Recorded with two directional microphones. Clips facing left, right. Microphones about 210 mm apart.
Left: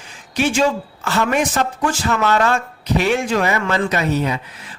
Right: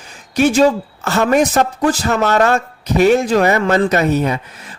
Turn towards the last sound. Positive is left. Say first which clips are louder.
# right 4 dB
turn(degrees=-45)  # may be behind; listen again after turning